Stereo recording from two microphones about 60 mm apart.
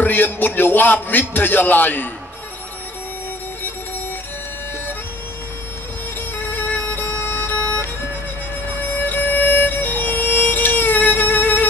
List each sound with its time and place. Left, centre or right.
0.0 s music: left
0.6 s a man's voice: left
6.5 s music: left
9.0 s music: left